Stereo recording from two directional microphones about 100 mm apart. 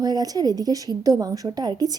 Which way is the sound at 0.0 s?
40° right (ahead or behind).